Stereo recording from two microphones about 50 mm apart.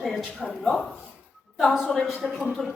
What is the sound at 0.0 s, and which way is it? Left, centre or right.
Speech, centre.